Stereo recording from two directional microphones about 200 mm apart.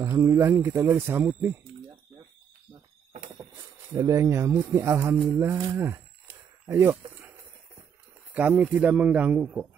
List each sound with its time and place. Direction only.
0.0 s speech: 15° right (ahead or behind)
3.9 s speech: 15° right (ahead or behind)
5.3 s cattle: 15° right (ahead or behind)
8.4 s speech: 10° right (ahead or behind)